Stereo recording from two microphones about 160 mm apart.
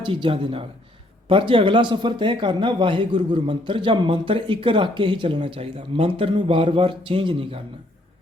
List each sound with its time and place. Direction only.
0.0 s speech: 30° right (ahead or behind)